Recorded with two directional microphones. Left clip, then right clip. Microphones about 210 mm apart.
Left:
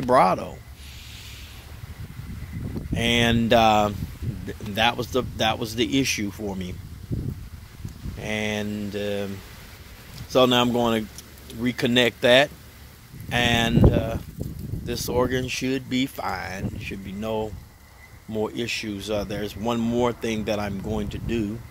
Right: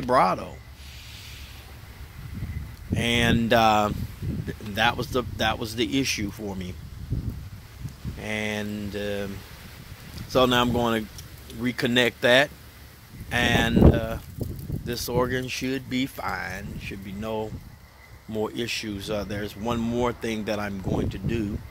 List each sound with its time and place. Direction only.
0.0 s speech: 15° left (ahead or behind)
2.9 s speech: 15° left (ahead or behind)
8.2 s speech: 10° left (ahead or behind)
10.3 s speech: 10° left (ahead or behind)